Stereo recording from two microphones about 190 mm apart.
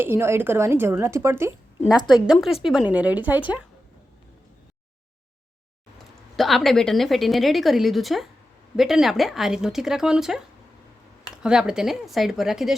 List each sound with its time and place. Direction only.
0.0 s speech: 10° right (ahead or behind)
2.0 s speech: 5° right (ahead or behind)
6.3 s a woman's voice: centre (ahead or behind)
11.4 s a woman's voice: 5° right (ahead or behind)